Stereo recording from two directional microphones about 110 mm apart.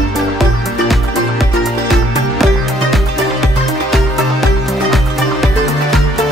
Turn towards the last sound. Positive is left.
turn(degrees=0)  # may be behind; listen again after turning